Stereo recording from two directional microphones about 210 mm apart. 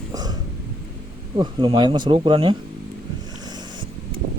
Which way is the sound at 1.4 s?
20° right (ahead or behind).